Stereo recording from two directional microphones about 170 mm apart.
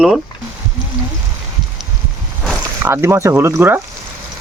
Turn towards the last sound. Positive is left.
turn(degrees=-10)  # may be behind; listen again after turning